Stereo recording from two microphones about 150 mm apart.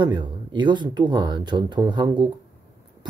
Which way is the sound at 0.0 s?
30° right (ahead or behind).